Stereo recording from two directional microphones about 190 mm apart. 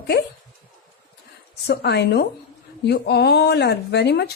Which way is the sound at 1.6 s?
60° left (ahead or behind).